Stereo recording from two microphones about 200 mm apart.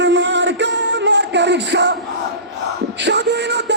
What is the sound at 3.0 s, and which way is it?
Speech, 60° right (ahead or behind).